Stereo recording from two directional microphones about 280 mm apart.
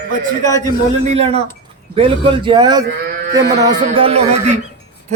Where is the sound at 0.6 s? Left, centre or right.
Right.